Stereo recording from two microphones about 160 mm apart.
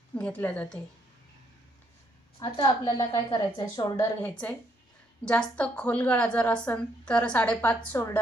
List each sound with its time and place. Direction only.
0.1 s a woman's voice: 10° left (ahead or behind)
2.4 s a woman's voice: 25° left (ahead or behind)
4.2 s a woman's voice: 10° left (ahead or behind)